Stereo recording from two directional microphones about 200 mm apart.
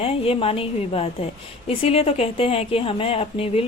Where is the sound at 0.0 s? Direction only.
30° left (ahead or behind).